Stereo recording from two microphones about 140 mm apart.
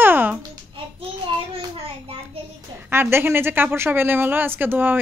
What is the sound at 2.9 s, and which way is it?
Speech, 15° right (ahead or behind).